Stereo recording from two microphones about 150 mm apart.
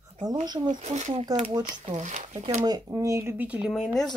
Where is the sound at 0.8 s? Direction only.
50° right (ahead or behind).